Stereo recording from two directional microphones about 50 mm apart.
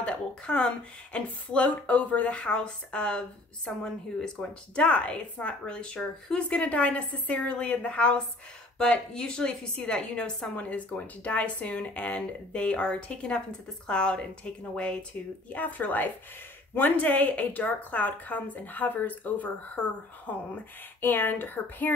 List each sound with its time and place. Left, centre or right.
0.0 s speech: left
15.5 s speech: left
21.0 s speech: left